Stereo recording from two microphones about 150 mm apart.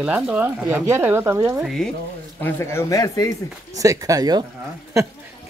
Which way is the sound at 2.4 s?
15° left (ahead or behind).